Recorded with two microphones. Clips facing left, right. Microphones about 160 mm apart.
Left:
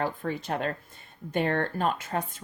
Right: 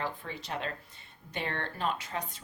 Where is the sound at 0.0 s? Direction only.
50° left (ahead or behind).